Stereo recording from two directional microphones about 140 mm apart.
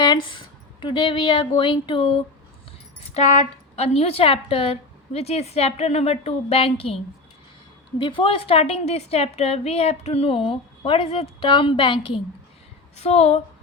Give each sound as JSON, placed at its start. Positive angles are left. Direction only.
{"t": 0.0, "sound": "speech", "side_deg": 30}
{"t": 3.2, "sound": "a woman's voice", "side_deg": 55}
{"t": 13.0, "sound": "a woman's voice", "side_deg": 50}